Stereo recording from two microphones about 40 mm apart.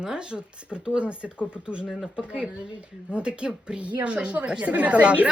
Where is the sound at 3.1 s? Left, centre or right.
Right.